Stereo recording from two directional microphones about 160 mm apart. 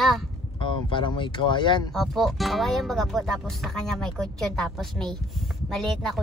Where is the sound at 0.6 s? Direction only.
30° left (ahead or behind).